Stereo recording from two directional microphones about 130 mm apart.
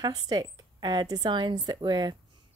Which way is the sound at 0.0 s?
30° right (ahead or behind).